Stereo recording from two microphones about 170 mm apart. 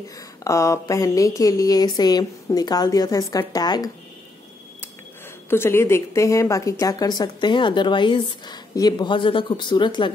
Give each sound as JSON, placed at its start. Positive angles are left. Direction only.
{"t": 0.4, "sound": "a woman's voice", "side_deg": 20}
{"t": 5.5, "sound": "a woman's voice", "side_deg": 15}